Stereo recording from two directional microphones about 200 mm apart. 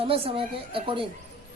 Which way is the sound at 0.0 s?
25° right (ahead or behind).